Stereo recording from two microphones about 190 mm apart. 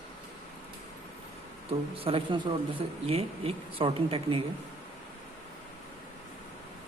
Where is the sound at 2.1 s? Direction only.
30° right (ahead or behind).